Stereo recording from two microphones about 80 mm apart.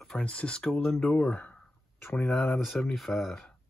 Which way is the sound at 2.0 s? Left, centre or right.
Left.